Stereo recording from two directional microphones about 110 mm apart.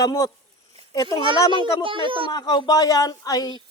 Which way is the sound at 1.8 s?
50° right (ahead or behind).